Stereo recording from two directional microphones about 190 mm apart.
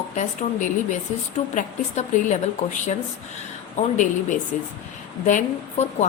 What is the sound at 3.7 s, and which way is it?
A woman's voice, 40° left (ahead or behind).